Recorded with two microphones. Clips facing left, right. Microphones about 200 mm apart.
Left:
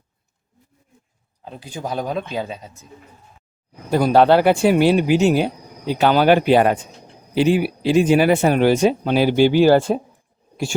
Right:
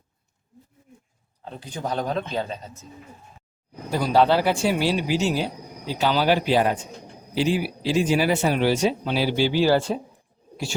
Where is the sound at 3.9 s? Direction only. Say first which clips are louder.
Left 6 dB; 55° left (ahead or behind).